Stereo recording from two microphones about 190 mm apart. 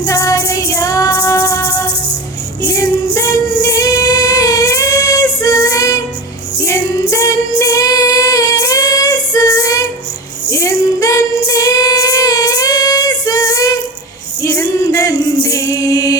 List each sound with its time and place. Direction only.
0.0 s music: 15° left (ahead or behind)
2.6 s female singing: 15° left (ahead or behind)
7.1 s female singing: 15° left (ahead or behind)
14.4 s music: 15° left (ahead or behind)